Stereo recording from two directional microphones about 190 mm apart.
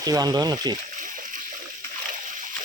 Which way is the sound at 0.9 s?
45° right (ahead or behind).